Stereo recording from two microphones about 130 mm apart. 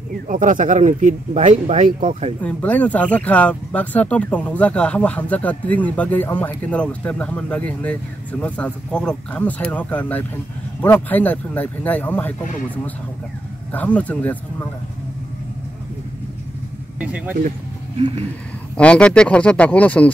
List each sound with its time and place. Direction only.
0.3 s speech: 85° right
2.4 s speech: 10° left (ahead or behind)
17.0 s speech: 10° right (ahead or behind)
18.8 s speech: 10° left (ahead or behind)